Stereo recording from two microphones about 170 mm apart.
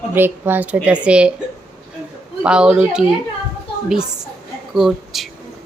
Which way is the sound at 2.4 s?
5° right (ahead or behind).